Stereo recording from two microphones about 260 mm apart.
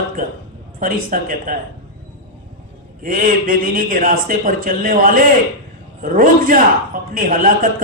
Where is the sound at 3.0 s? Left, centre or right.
Right.